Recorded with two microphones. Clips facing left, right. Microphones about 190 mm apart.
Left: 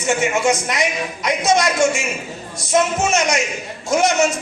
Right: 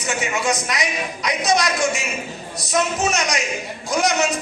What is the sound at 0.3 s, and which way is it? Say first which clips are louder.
Speech: left 4 dB; 25° left (ahead or behind).